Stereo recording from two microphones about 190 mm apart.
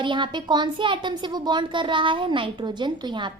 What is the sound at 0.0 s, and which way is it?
A woman's voice, 25° right (ahead or behind).